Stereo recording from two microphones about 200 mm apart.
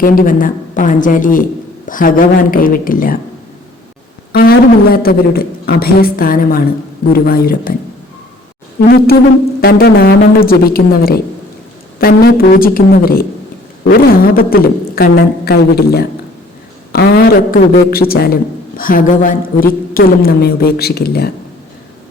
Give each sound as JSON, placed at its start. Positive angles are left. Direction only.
{"t": 0.0, "sound": "a woman's voice", "side_deg": 45}
{"t": 4.3, "sound": "a woman's voice", "side_deg": 50}
{"t": 9.6, "sound": "a woman's voice", "side_deg": 50}